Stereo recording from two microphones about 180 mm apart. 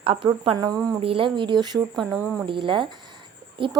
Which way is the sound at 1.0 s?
30° right (ahead or behind).